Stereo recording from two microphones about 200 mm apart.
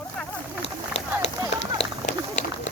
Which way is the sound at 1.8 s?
35° left (ahead or behind).